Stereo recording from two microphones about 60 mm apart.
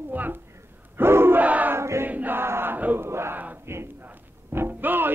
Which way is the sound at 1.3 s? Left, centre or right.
Right.